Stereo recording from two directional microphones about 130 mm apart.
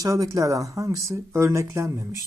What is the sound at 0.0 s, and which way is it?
Speech, 25° right (ahead or behind).